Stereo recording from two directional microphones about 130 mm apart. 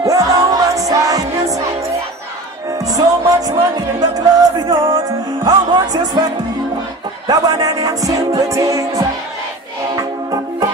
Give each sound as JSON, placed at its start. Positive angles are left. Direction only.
{"t": 0.1, "sound": "music", "side_deg": -25}
{"t": 7.2, "sound": "music", "side_deg": -30}